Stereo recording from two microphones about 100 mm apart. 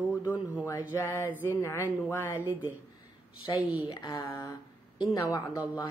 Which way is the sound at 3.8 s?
40° left (ahead or behind).